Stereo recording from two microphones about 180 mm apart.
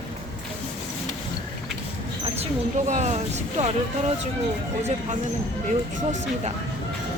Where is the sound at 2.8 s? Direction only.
40° right (ahead or behind).